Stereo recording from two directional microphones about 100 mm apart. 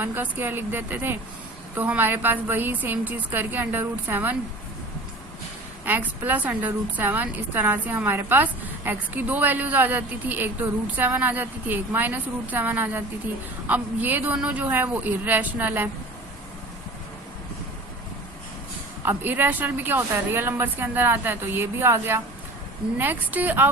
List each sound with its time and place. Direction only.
0.0 s a woman's voice: 20° right (ahead or behind)
5.8 s a woman's voice: 20° right (ahead or behind)
19.0 s a woman's voice: 20° right (ahead or behind)